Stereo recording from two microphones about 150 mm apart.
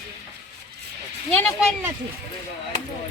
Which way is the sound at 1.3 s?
10° left (ahead or behind).